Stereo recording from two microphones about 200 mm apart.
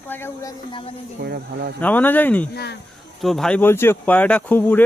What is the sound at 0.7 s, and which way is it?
Speech, 25° left (ahead or behind).